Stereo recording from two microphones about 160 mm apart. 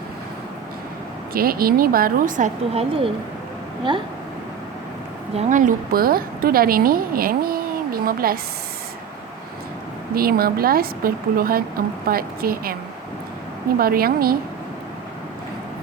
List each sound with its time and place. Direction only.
1.3 s speech: 65° right (ahead or behind)
2.7 s speech: 35° right (ahead or behind)
5.3 s a woman's voice: 45° right (ahead or behind); by 8.4 s 65° right (ahead or behind)
10.2 s a woman's voice: 70° right (ahead or behind)
13.7 s a woman's voice: 70° right (ahead or behind)